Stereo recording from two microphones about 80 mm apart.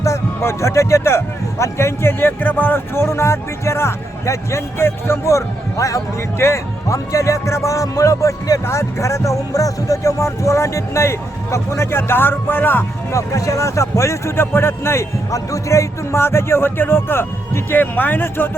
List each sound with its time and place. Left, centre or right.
0.0 s speech: left
13.1 s speech: left